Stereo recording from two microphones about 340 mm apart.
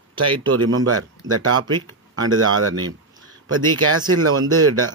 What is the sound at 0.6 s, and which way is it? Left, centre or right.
Speech, right.